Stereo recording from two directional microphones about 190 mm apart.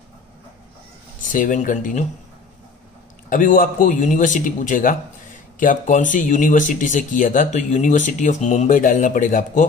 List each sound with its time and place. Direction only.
1.2 s a man's voice: 45° left (ahead or behind)
3.3 s a man's voice: 45° left (ahead or behind)